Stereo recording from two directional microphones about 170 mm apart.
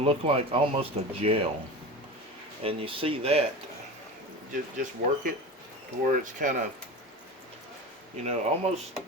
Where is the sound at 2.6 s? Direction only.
35° right (ahead or behind).